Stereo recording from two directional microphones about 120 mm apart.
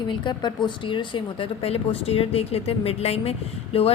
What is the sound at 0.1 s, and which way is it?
A woman's voice, 40° left (ahead or behind).